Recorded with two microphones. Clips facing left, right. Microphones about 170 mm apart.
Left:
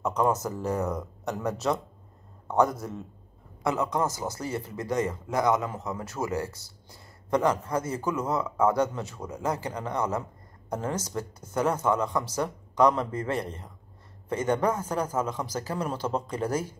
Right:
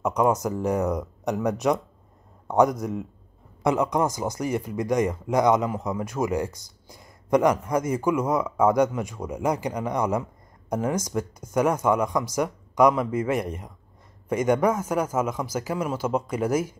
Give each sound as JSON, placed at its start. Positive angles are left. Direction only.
{"t": 0.0, "sound": "speech", "side_deg": -15}